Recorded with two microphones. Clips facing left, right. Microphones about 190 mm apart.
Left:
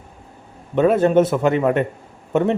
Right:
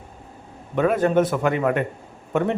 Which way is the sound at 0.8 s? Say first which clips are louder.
Left 4 dB; 25° left (ahead or behind).